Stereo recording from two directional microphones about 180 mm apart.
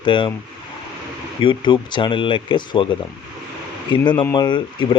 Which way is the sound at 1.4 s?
25° left (ahead or behind).